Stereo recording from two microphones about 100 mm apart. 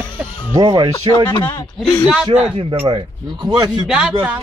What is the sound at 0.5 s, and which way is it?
Speech, 50° right (ahead or behind).